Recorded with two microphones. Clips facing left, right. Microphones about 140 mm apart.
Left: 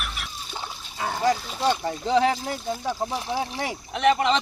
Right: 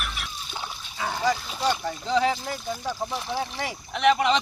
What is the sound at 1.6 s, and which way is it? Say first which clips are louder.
Speech: left 2 dB; 25° left (ahead or behind).